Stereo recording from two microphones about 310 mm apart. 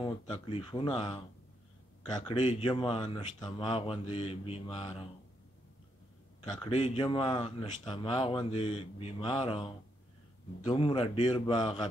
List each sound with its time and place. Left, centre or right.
0.0 s speech: centre
6.5 s speech: centre